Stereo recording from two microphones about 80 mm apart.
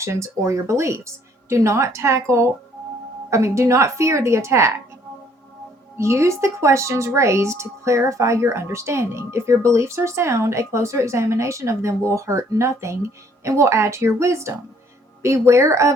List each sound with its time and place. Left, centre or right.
0.0 s speech: right
6.0 s speech: right